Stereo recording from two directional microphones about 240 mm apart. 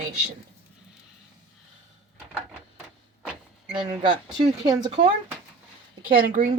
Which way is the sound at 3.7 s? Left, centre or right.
Right.